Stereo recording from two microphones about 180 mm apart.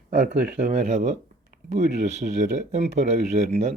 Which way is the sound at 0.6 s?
40° right (ahead or behind).